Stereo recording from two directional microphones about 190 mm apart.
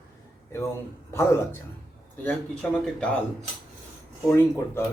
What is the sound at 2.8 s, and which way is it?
Speech, 5° left (ahead or behind).